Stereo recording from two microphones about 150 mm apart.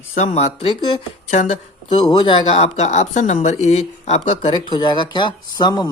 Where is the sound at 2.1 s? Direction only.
35° left (ahead or behind).